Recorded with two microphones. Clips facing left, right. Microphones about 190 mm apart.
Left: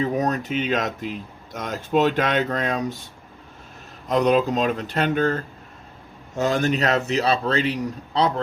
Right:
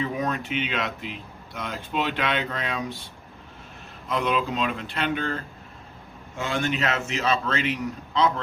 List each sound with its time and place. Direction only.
0.0 s speech: 40° left (ahead or behind)
4.1 s speech: 40° left (ahead or behind)